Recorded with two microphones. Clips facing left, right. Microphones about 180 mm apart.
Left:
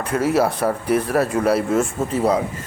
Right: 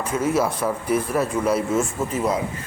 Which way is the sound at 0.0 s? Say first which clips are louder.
Left 3 dB; 65° left (ahead or behind).